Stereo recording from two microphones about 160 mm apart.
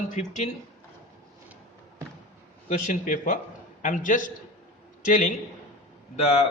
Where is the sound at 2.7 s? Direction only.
50° left (ahead or behind).